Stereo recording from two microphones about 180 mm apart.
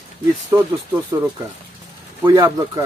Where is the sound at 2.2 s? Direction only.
15° right (ahead or behind).